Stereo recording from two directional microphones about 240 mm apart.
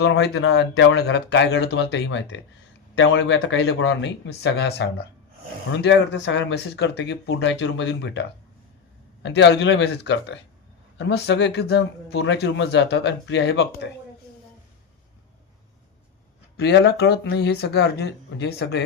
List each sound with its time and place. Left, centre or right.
0.0 s a man's voice: left
16.6 s a man's voice: left